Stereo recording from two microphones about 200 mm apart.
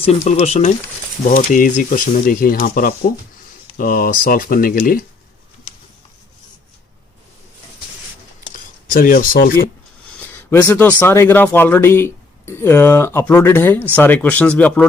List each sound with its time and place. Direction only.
0.0 s speech: 35° left (ahead or behind)
8.5 s a sound: 45° left (ahead or behind)
10.1 s speech: 10° left (ahead or behind)